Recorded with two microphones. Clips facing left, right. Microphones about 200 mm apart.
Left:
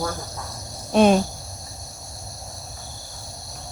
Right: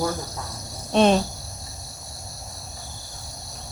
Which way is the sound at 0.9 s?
5° left (ahead or behind).